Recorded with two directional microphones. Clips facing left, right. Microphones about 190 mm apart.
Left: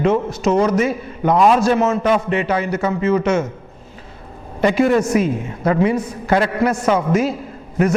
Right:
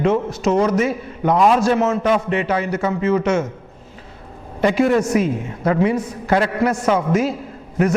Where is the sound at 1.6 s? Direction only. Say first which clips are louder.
Left 1 dB; 10° left (ahead or behind).